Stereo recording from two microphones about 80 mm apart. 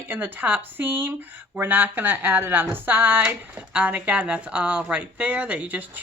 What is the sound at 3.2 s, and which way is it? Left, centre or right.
Speech, centre.